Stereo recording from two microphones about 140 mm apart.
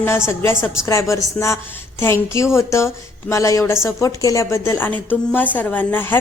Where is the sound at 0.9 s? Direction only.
20° left (ahead or behind).